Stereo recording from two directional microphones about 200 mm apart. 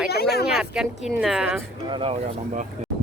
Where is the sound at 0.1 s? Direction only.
55° left (ahead or behind).